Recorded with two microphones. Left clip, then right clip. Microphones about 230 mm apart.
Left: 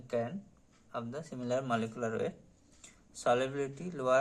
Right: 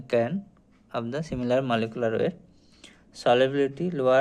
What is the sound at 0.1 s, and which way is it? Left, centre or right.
Speech, right.